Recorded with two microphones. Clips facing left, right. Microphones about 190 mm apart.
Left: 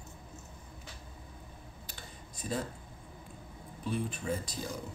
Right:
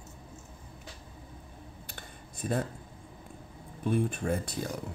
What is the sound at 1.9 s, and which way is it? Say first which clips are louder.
Computer keyboard: right 2 dB; 55° right (ahead or behind).